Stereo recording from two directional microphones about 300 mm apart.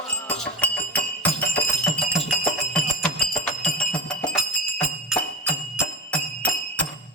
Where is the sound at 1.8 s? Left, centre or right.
Centre.